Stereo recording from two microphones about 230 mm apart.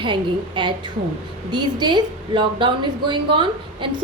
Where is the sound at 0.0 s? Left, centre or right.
Right.